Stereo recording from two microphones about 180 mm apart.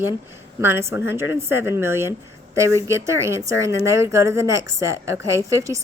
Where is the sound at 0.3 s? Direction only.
15° right (ahead or behind).